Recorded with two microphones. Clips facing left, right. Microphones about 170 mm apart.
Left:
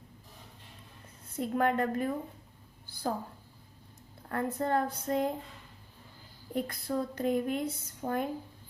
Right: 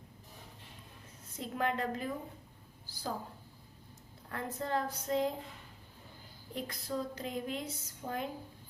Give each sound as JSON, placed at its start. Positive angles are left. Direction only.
{"t": 1.3, "sound": "a woman's voice", "side_deg": 55}
{"t": 2.8, "sound": "a sound", "side_deg": 55}
{"t": 4.3, "sound": "a woman's voice", "side_deg": 55}
{"t": 6.5, "sound": "a woman's voice", "side_deg": 55}